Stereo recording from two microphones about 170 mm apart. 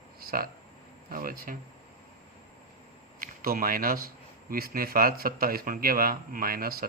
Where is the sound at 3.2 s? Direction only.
60° right (ahead or behind).